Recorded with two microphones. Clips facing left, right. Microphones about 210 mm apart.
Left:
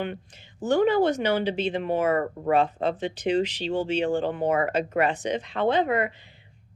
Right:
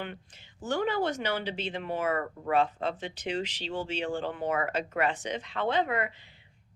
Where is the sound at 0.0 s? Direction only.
20° left (ahead or behind).